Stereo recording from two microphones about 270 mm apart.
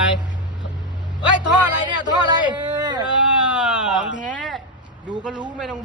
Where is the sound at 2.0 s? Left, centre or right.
Centre.